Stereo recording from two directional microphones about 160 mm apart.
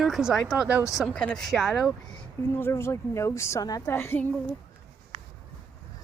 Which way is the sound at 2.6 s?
15° left (ahead or behind).